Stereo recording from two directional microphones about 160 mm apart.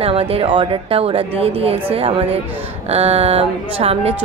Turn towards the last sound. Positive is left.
turn(degrees=-40)  # may be behind; listen again after turning